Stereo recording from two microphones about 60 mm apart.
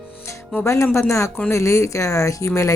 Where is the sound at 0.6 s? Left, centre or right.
Left.